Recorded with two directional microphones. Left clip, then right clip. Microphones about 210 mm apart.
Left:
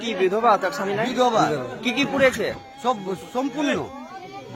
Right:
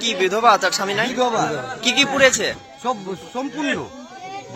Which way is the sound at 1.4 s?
Centre (ahead or behind).